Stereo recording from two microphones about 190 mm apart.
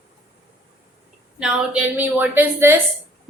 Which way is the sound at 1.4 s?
5° right (ahead or behind).